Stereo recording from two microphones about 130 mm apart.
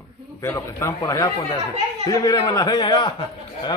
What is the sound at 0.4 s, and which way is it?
A man's voice, 20° left (ahead or behind).